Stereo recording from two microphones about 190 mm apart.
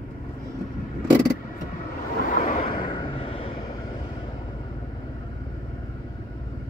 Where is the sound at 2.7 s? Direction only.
25° left (ahead or behind).